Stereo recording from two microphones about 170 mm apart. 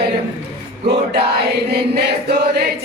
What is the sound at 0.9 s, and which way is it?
Music, 75° right (ahead or behind).